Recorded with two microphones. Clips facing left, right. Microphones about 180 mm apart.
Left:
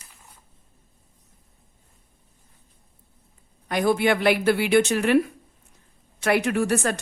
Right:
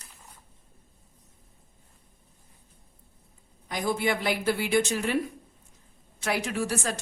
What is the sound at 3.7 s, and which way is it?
Speech, 70° left (ahead or behind).